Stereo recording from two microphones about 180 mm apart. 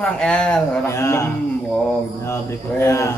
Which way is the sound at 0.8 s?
15° left (ahead or behind).